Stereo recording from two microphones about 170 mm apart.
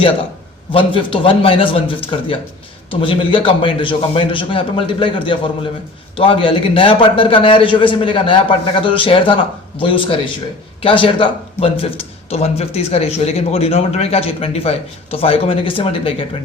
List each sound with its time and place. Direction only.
0.7 s speech: 30° left (ahead or behind)